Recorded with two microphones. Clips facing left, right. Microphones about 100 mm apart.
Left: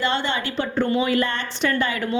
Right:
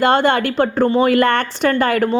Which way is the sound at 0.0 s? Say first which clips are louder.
Right 9 dB; 50° right (ahead or behind).